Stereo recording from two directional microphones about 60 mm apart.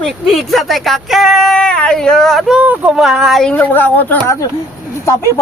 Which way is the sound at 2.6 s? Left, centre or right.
Right.